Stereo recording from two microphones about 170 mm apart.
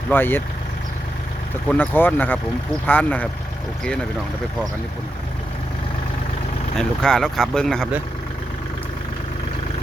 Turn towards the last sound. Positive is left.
turn(degrees=5)  # may be behind; listen again after turning